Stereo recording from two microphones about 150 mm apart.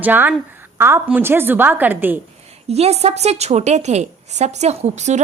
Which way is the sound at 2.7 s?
45° right (ahead or behind).